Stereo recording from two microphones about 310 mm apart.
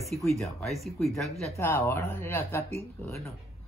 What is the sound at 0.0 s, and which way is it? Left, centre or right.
Speech, centre.